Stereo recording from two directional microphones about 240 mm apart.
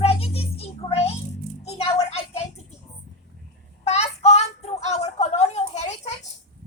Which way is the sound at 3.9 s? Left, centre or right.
Left.